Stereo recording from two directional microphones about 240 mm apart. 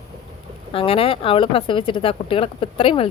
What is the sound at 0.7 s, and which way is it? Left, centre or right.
Speech, left.